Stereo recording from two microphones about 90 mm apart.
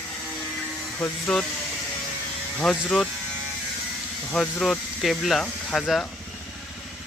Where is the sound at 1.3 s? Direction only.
10° left (ahead or behind).